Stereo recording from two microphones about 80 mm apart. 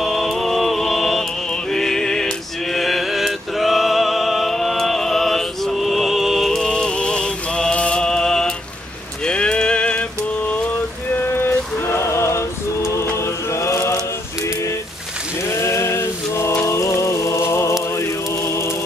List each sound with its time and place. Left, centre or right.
0.0 s music: centre
9.2 s rain on surface: centre
11.1 s a sound: left
12.0 s mantra: left
13.1 s chant: left
15.6 s a sound: left
17.8 s chant: left